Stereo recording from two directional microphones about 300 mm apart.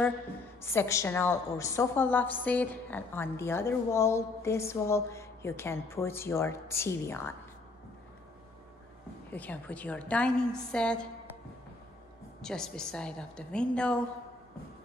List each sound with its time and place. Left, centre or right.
0.6 s a woman's voice: centre
9.3 s a woman's voice: centre
12.4 s a woman's voice: centre